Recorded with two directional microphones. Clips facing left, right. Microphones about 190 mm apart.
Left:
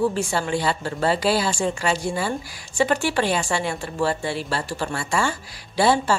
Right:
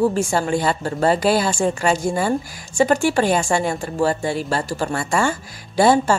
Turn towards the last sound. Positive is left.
turn(degrees=-45)  # may be behind; listen again after turning